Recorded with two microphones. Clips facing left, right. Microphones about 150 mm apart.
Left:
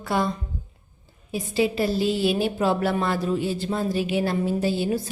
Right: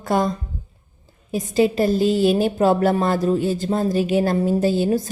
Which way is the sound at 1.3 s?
45° right (ahead or behind).